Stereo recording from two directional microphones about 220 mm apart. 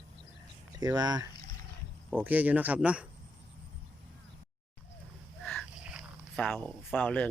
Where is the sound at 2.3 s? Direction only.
5° right (ahead or behind).